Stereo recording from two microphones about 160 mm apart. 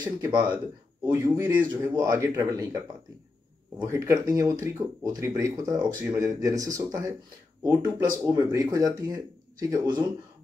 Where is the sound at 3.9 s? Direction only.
20° right (ahead or behind).